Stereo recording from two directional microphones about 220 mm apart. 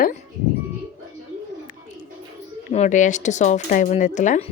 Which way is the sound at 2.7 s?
35° left (ahead or behind).